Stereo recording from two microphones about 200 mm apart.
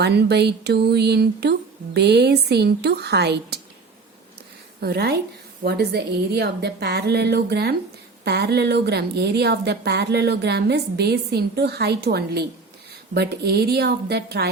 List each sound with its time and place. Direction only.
0.0 s a woman's voice: 55° right (ahead or behind)
4.8 s a woman's voice: 50° right (ahead or behind)